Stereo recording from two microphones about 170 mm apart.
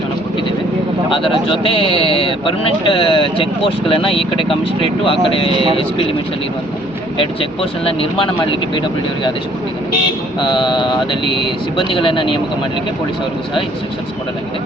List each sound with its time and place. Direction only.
1.1 s speech: 30° left (ahead or behind)
5.5 s speech: 25° right (ahead or behind)
7.2 s speech: 30° left (ahead or behind)
10.4 s a sound: 25° left (ahead or behind)